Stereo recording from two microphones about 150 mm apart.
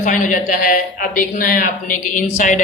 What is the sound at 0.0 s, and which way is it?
A man's voice, 60° left (ahead or behind).